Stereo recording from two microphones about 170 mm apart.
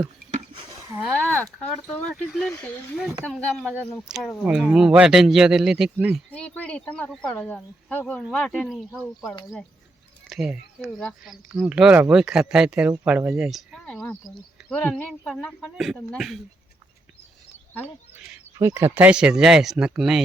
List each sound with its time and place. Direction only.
1.2 s speech: 10° left (ahead or behind)
6.3 s speech: 10° left (ahead or behind)
18.3 s speech: 15° right (ahead or behind)